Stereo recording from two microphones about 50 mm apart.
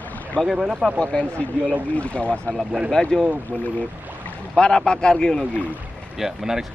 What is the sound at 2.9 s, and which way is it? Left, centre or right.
Speech, centre.